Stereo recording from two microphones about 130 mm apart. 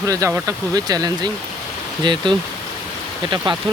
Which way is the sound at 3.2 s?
35° right (ahead or behind).